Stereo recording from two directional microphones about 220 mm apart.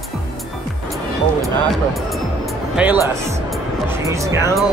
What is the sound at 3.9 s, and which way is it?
Speech, 15° right (ahead or behind).